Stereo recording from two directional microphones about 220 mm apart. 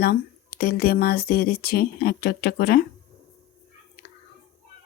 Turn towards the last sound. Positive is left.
turn(degrees=40)  # may be behind; listen again after turning